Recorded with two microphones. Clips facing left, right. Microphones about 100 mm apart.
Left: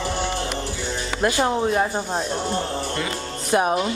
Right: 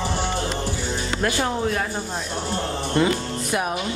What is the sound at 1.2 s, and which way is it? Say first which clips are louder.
Speech: left 4 dB; 20° left (ahead or behind).